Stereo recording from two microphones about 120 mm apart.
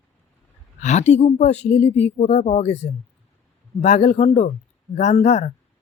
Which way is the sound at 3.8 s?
70° left (ahead or behind).